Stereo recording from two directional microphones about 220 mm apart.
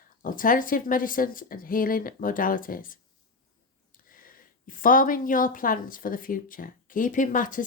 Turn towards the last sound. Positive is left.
turn(degrees=35)  # may be behind; listen again after turning